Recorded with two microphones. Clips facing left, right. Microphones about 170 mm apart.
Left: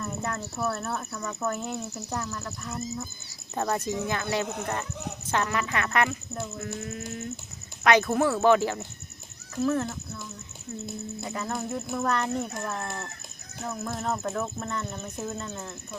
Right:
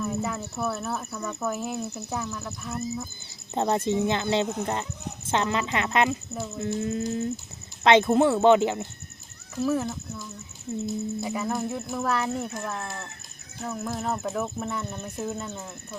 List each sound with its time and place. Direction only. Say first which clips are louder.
0.0 s speech: right 3 dB; 5° right (ahead or behind)
3.5 s speech: right 4 dB; 25° right (ahead or behind)
9.6 s speech: right 1 dB; 5° right (ahead or behind)
11.2 s speech: even; 5° right (ahead or behind)